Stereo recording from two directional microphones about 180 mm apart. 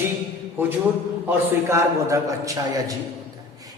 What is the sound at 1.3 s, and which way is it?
A man's voice, 15° right (ahead or behind).